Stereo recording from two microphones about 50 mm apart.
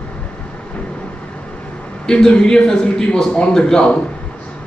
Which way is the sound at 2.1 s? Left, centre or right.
Centre.